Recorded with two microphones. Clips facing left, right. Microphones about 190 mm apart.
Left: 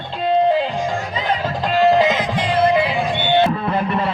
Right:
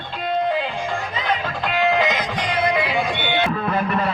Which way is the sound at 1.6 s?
35° left (ahead or behind).